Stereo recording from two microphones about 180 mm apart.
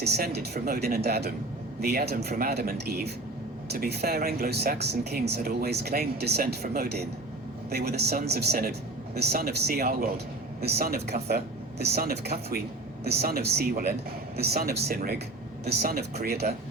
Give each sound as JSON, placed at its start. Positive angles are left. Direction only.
{"t": 0.0, "sound": "speech", "side_deg": -65}